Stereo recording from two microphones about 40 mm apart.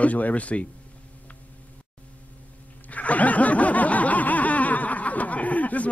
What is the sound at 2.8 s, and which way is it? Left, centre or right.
Snicker, left.